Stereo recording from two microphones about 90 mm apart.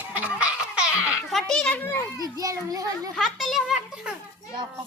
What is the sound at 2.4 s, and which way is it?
Speech, 40° right (ahead or behind).